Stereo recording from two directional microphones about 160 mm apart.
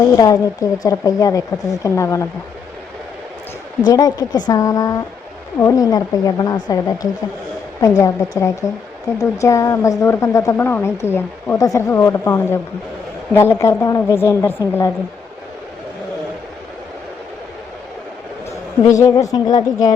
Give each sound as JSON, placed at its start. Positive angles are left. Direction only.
{"t": 0.2, "sound": "a woman's voice", "side_deg": 25}
{"t": 3.8, "sound": "a woman's voice", "side_deg": 25}
{"t": 18.9, "sound": "a woman's voice", "side_deg": 20}